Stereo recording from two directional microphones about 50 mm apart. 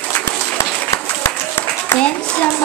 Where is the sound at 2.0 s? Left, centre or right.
Left.